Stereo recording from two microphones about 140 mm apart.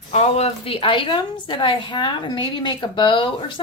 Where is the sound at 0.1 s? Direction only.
50° left (ahead or behind).